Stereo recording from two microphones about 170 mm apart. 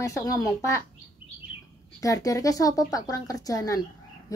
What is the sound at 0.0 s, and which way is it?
Speech, 20° left (ahead or behind).